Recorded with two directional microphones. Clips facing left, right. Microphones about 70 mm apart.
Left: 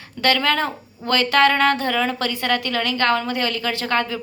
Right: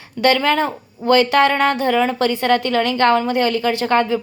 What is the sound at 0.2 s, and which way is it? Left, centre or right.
A woman's voice, centre.